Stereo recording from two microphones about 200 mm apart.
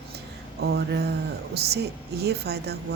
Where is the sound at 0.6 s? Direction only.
55° right (ahead or behind).